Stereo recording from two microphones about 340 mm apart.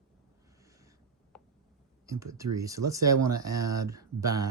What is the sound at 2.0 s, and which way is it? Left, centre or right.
Speech, centre.